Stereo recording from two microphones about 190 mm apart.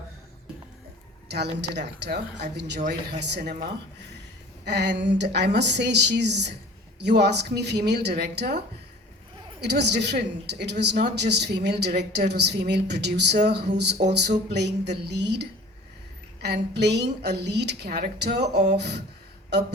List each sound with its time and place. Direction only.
1.3 s a woman's voice: 60° right (ahead or behind)
4.6 s a woman's voice: 65° right (ahead or behind)